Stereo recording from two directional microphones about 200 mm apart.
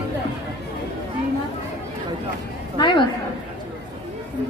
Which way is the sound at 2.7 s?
20° left (ahead or behind).